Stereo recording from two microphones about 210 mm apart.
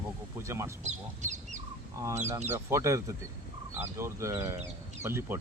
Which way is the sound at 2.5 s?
15° right (ahead or behind).